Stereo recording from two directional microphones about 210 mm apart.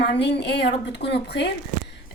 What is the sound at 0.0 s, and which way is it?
A woman's voice, 55° left (ahead or behind).